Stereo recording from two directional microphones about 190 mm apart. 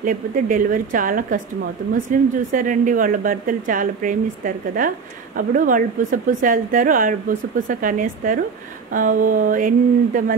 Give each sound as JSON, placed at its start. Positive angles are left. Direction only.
{"t": 0.0, "sound": "a woman's voice", "side_deg": -45}